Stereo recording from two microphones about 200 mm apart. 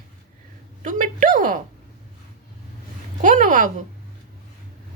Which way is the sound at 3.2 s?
40° right (ahead or behind).